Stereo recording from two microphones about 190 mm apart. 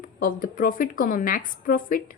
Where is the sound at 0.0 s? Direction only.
45° left (ahead or behind).